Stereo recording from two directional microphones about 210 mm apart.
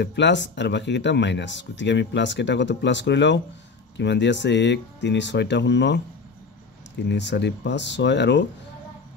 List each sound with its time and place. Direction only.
0.0 s speech: 55° left (ahead or behind)
7.1 s speech: 55° left (ahead or behind)